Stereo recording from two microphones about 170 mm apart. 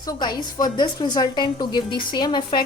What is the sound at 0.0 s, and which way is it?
A woman's voice, 25° left (ahead or behind).